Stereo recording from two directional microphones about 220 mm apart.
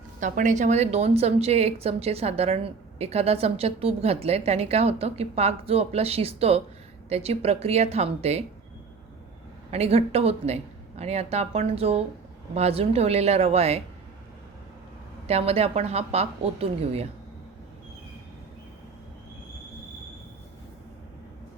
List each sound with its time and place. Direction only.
0.2 s speech: 35° right (ahead or behind)
9.7 s speech: 30° right (ahead or behind)
15.3 s speech: 25° right (ahead or behind)